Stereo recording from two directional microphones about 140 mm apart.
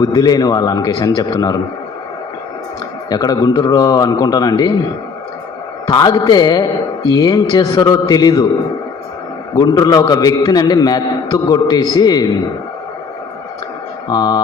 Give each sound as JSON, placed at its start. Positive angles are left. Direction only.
{"t": 0.0, "sound": "a man's voice", "side_deg": 25}
{"t": 3.1, "sound": "a man's voice", "side_deg": 30}
{"t": 5.9, "sound": "a man's voice", "side_deg": 30}
{"t": 9.6, "sound": "a man's voice", "side_deg": 25}
{"t": 14.1, "sound": "a man's voice", "side_deg": 30}